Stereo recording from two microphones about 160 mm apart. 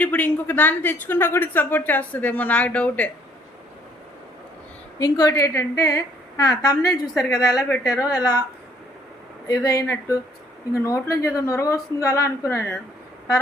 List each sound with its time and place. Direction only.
0.0 s speech: 10° left (ahead or behind)
4.9 s a woman's voice: 25° left (ahead or behind)
9.5 s a woman's voice: 25° left (ahead or behind)